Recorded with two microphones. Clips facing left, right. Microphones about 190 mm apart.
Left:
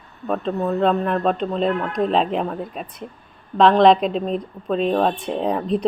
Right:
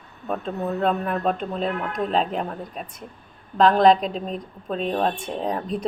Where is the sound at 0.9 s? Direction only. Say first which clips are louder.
Left 3 dB; 75° left (ahead or behind).